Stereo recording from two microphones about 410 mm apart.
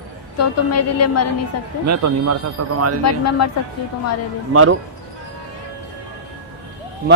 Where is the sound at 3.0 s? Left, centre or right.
Left.